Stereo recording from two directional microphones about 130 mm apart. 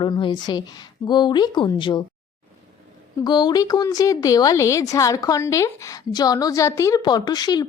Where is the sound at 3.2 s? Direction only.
30° left (ahead or behind).